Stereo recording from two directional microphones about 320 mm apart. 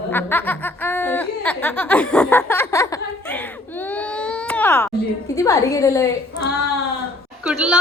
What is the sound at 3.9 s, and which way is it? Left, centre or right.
Baby cry, centre.